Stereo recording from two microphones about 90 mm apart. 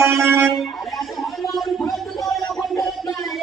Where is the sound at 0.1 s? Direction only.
25° right (ahead or behind).